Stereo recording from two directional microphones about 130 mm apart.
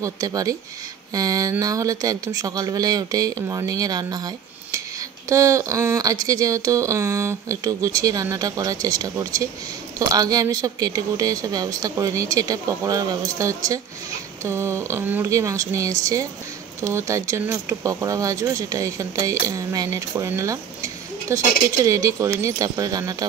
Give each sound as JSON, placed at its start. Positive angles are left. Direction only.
{"t": 0.0, "sound": "speech", "side_deg": -30}